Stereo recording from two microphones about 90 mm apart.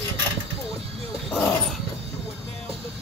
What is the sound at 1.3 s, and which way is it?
Dog, 5° left (ahead or behind).